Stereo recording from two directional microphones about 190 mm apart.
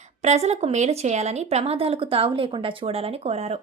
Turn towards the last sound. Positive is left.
turn(degrees=-35)  # may be behind; listen again after turning